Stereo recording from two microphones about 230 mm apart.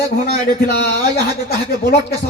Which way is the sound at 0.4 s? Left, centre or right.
Left.